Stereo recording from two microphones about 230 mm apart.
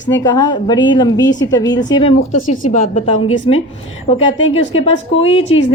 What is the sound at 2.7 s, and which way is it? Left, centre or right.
Speech, left.